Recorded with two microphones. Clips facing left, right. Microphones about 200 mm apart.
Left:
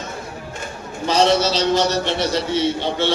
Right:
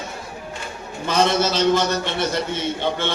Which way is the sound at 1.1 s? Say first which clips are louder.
Left 3 dB; 50° right (ahead or behind).